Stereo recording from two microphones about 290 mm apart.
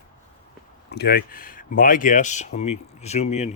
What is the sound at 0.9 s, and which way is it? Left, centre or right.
Speech, left.